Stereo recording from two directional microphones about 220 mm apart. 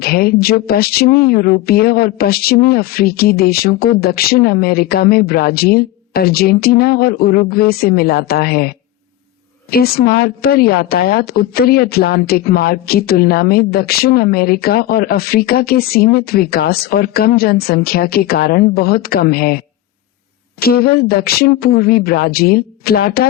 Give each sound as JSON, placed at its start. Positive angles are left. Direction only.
{"t": 0.0, "sound": "a woman's voice", "side_deg": 45}